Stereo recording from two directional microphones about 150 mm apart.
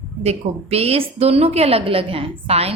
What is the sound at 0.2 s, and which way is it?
A woman's voice, 45° right (ahead or behind).